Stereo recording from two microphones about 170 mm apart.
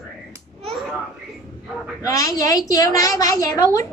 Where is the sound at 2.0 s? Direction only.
20° left (ahead or behind).